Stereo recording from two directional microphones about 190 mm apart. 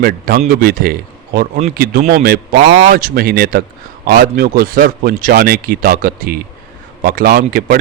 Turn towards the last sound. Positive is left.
turn(degrees=-50)  # may be behind; listen again after turning